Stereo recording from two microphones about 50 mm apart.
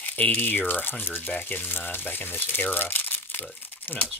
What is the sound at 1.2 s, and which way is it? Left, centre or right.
Speech, left.